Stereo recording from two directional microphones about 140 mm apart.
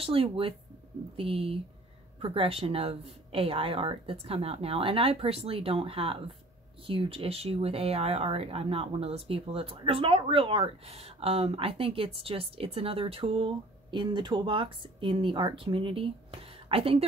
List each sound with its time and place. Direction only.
0.0 s speech: 40° right (ahead or behind)